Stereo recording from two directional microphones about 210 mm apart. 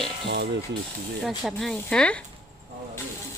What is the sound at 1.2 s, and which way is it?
Speech, centre (ahead or behind).